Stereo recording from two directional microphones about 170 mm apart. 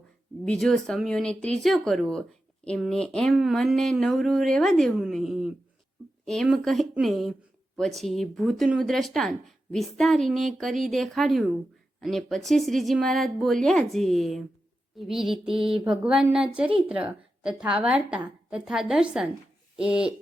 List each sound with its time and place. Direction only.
0.4 s speech: 5° left (ahead or behind)
15.4 s speech: 30° right (ahead or behind)
15.9 s a woman's voice: 5° right (ahead or behind)